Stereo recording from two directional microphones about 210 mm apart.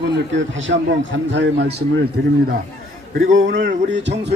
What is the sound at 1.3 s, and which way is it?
Speech, 55° right (ahead or behind).